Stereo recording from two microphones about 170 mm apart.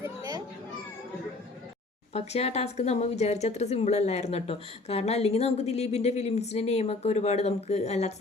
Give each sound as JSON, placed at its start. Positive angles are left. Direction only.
{"t": 0.2, "sound": "children playing", "side_deg": -20}
{"t": 2.1, "sound": "a woman's voice", "side_deg": 40}